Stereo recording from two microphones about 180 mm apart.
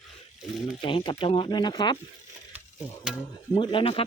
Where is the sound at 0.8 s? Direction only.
30° left (ahead or behind).